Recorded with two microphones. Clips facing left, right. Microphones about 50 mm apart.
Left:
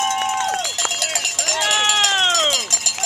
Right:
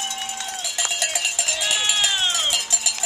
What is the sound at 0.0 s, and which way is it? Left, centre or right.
Cowbell, left.